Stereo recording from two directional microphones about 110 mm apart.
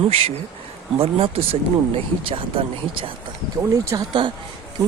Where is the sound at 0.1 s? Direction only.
65° right (ahead or behind).